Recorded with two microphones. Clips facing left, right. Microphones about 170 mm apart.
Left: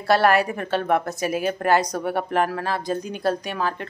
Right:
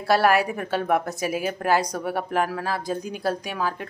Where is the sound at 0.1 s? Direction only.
5° right (ahead or behind).